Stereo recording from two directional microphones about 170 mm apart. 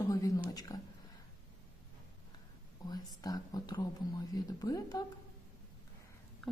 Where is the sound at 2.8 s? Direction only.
25° left (ahead or behind).